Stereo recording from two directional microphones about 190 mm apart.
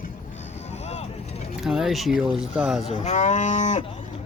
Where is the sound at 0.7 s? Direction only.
35° left (ahead or behind).